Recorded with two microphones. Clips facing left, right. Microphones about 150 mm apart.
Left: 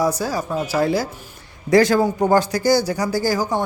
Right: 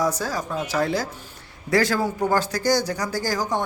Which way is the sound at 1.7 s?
20° left (ahead or behind).